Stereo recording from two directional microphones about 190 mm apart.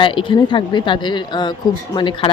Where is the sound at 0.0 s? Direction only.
25° left (ahead or behind).